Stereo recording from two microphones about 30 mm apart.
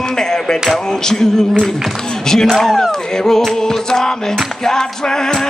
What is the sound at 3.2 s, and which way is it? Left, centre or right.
Music, left.